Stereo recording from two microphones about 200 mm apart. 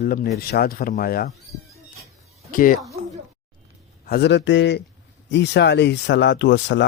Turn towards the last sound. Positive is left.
turn(degrees=60)  # may be behind; listen again after turning